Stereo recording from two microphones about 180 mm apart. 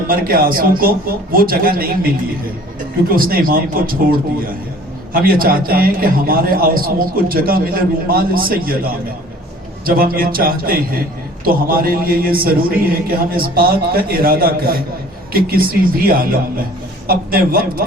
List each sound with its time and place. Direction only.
0.1 s a man's voice: 55° right (ahead or behind)